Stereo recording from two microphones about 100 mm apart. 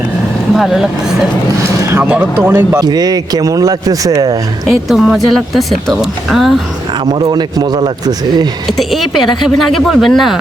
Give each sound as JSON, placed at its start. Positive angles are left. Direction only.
{"t": 0.5, "sound": "speech", "side_deg": -5}
{"t": 1.8, "sound": "vehicle", "side_deg": -30}
{"t": 2.0, "sound": "speech", "side_deg": -15}
{"t": 2.8, "sound": "speech", "side_deg": -40}
{"t": 4.6, "sound": "speech", "side_deg": 0}
{"t": 7.1, "sound": "a man's voice", "side_deg": -45}
{"t": 8.8, "sound": "speech", "side_deg": 0}